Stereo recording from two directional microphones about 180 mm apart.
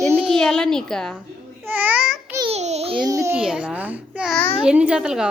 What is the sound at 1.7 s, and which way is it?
Babbling, 10° right (ahead or behind).